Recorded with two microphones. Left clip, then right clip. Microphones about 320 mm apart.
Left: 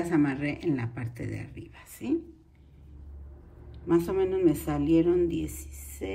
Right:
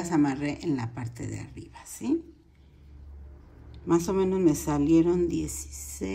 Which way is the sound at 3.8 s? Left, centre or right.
Centre.